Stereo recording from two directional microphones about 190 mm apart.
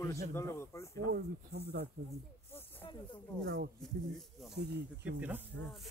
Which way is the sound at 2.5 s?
10° left (ahead or behind).